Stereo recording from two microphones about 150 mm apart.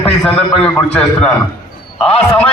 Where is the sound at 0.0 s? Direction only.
10° left (ahead or behind).